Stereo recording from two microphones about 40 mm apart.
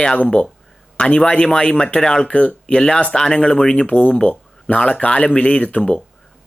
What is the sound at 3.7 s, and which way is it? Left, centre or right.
Speech, left.